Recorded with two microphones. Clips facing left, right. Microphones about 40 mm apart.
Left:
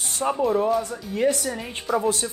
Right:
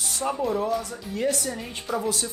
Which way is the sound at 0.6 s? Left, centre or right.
Centre.